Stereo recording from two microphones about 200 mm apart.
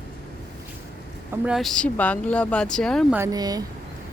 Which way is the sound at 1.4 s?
Centre (ahead or behind).